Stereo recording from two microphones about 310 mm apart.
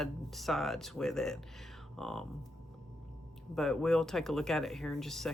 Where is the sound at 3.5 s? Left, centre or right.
Centre.